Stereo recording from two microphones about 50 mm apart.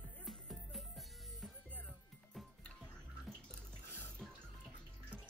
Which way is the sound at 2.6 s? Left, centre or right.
Centre.